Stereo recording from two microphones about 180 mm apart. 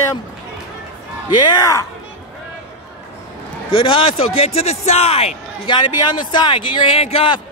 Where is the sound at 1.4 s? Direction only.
25° left (ahead or behind).